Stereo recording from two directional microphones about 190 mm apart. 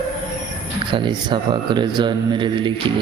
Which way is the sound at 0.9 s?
25° right (ahead or behind).